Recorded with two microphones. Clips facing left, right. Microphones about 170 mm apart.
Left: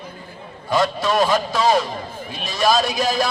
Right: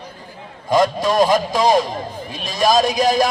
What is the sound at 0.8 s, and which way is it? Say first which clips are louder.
A man's voice: right 3 dB; 15° right (ahead or behind).